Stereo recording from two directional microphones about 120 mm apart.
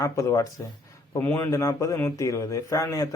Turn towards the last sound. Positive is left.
turn(degrees=25)  # may be behind; listen again after turning